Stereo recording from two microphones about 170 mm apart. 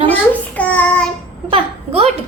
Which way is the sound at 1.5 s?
35° right (ahead or behind).